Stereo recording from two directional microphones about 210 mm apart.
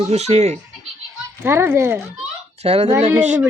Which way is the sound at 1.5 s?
10° right (ahead or behind).